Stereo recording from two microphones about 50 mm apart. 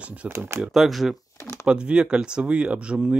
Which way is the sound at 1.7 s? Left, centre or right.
Centre.